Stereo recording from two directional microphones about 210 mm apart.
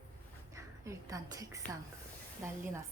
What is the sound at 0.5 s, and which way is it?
A woman's voice, 15° right (ahead or behind).